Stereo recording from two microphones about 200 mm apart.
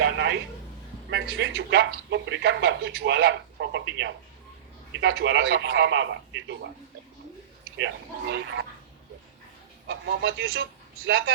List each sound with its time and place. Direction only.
0.0 s a sound: 60° right (ahead or behind)
1.1 s speech: 65° right (ahead or behind)
7.8 s speech: 65° right (ahead or behind)
10.2 s a man's voice: 80° right